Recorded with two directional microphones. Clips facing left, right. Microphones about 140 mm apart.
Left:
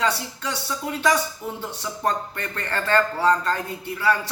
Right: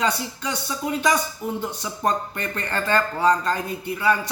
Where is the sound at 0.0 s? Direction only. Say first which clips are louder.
Even; 15° right (ahead or behind).